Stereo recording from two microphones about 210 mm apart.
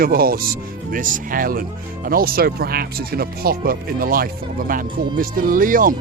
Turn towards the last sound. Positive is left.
turn(degrees=-40)  # may be behind; listen again after turning